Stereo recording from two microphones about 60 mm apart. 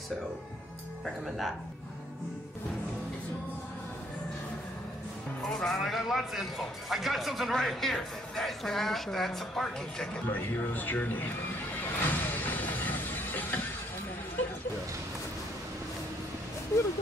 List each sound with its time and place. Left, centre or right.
1.0 s speech: centre
5.4 s speech: centre
10.2 s speech: left
12.0 s music: left